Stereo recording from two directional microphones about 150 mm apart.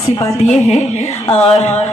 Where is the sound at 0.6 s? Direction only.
45° left (ahead or behind).